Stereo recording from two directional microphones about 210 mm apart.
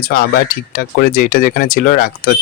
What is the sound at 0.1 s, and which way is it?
Speech, 45° left (ahead or behind).